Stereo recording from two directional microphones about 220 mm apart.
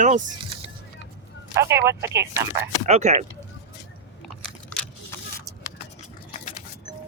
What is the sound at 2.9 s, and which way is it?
Speech, 30° right (ahead or behind).